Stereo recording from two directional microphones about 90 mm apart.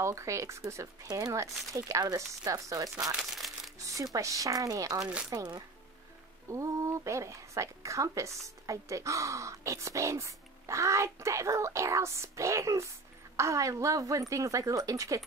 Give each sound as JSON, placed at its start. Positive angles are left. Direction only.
{"t": 0.0, "sound": "speech", "side_deg": -35}
{"t": 1.0, "sound": "speech", "side_deg": -45}
{"t": 3.2, "sound": "crumpling", "side_deg": 0}
{"t": 3.7, "sound": "speech", "side_deg": -35}
{"t": 5.3, "sound": "speech", "side_deg": -50}
{"t": 6.5, "sound": "speech", "side_deg": -35}